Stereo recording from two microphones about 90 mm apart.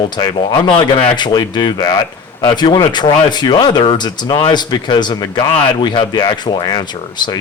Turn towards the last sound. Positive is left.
turn(degrees=55)  # may be behind; listen again after turning